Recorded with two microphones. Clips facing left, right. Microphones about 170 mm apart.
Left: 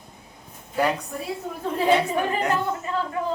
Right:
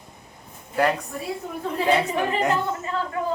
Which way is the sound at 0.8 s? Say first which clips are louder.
Right 1 dB; centre (ahead or behind).